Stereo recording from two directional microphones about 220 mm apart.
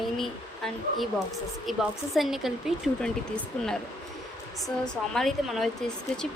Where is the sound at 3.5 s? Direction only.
5° left (ahead or behind).